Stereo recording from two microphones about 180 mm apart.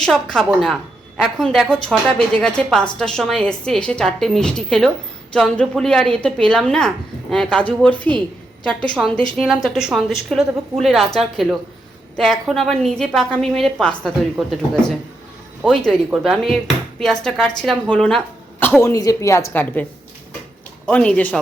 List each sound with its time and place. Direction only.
0.0 s a woman's voice: centre (ahead or behind)
18.8 s speech: 20° left (ahead or behind)